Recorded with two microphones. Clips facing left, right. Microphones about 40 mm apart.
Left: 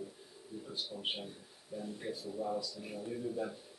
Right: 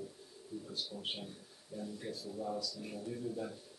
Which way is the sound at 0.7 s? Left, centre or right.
Left.